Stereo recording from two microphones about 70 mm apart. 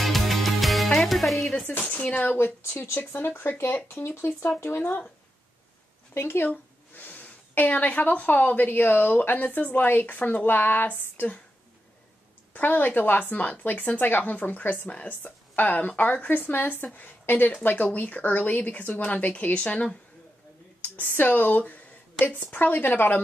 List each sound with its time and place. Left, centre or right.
0.0 s music: centre
1.7 s a woman's voice: centre
2.3 s speech: left
6.1 s a woman's voice: left
12.5 s a woman's voice: left